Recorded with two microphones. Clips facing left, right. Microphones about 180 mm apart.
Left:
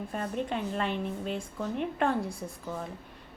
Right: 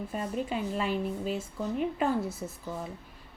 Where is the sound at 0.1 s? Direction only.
5° right (ahead or behind).